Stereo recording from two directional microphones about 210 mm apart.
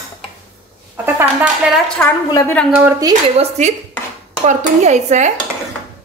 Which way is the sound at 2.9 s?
15° right (ahead or behind).